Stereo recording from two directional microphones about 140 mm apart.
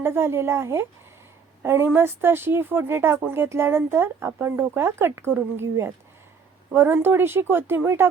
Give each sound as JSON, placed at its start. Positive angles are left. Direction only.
{"t": 0.0, "sound": "speech", "side_deg": -15}